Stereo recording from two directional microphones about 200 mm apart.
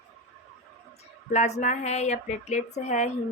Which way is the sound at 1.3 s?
35° left (ahead or behind).